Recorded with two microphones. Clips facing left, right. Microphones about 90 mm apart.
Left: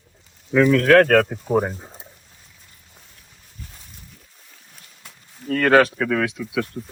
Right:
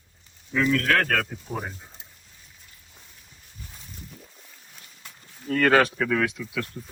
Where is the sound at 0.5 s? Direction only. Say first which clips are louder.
Left 9 dB; 45° left (ahead or behind).